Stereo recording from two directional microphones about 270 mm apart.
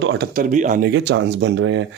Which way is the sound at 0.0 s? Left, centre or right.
Right.